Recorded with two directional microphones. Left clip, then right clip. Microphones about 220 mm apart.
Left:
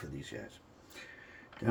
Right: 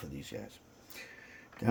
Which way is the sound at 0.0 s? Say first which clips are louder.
Even; 35° right (ahead or behind).